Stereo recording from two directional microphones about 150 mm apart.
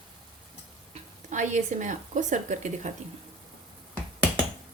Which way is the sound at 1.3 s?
55° right (ahead or behind).